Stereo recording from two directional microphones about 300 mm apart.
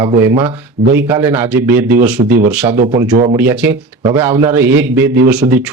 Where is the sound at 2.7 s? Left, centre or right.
Right.